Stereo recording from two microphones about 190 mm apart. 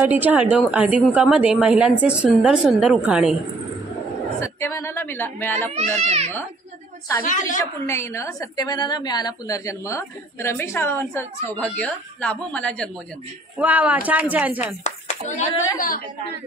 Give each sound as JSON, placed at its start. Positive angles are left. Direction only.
{"t": 0.0, "sound": "a woman's voice", "side_deg": -10}
{"t": 4.4, "sound": "a woman's voice", "side_deg": 15}
{"t": 5.8, "sound": "speech", "side_deg": -35}
{"t": 7.2, "sound": "a woman's voice", "side_deg": 45}
{"t": 7.8, "sound": "a woman's voice", "side_deg": 15}
{"t": 13.6, "sound": "speech", "side_deg": -10}
{"t": 14.8, "sound": "speech", "side_deg": 40}